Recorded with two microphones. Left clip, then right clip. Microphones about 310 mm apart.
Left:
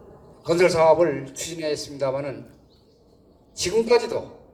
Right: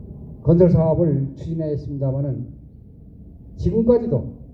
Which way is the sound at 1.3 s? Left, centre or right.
Centre.